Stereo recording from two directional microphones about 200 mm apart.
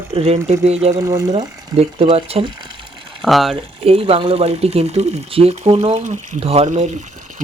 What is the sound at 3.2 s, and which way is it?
Speech, centre (ahead or behind).